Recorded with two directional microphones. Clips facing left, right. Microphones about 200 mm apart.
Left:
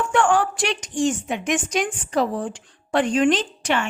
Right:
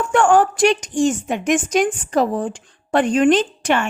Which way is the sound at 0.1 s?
45° right (ahead or behind).